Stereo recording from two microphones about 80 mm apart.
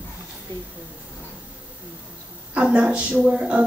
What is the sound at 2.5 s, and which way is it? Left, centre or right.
Speech, centre.